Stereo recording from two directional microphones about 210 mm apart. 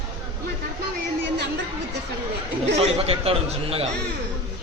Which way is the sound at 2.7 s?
30° right (ahead or behind).